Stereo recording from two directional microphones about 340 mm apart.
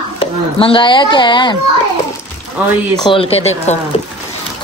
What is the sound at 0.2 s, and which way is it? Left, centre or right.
Speech, centre.